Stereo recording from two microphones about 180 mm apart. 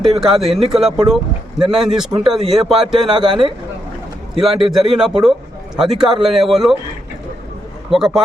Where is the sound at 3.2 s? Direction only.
25° right (ahead or behind).